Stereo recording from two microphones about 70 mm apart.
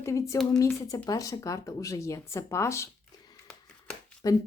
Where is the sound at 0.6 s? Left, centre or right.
Left.